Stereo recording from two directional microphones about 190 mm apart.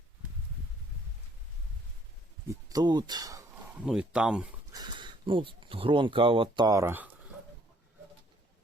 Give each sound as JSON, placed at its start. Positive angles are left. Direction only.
{"t": 2.5, "sound": "speech", "side_deg": -20}
{"t": 3.8, "sound": "speech", "side_deg": -5}
{"t": 4.7, "sound": "speech", "side_deg": -20}